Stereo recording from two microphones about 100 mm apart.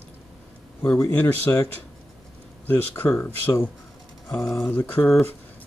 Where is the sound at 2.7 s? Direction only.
20° left (ahead or behind).